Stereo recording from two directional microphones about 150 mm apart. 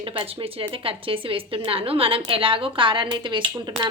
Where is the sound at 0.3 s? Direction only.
40° right (ahead or behind).